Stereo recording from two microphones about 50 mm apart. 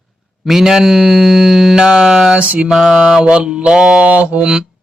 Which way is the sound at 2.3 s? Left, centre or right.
Right.